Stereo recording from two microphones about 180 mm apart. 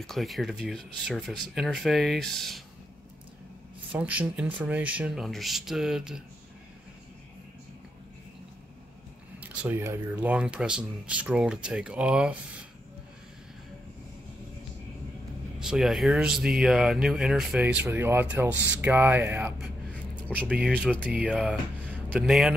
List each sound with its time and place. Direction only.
0.0 s speech: centre (ahead or behind)
3.9 s speech: 10° right (ahead or behind)
9.4 s speech: 10° right (ahead or behind)
15.6 s speech: centre (ahead or behind)